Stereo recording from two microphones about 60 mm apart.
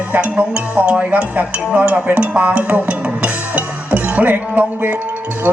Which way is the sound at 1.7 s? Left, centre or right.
Right.